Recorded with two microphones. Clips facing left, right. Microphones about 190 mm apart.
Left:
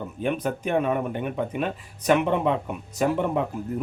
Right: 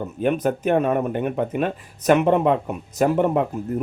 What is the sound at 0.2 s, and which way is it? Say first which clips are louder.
Speech: right 5 dB; 45° right (ahead or behind).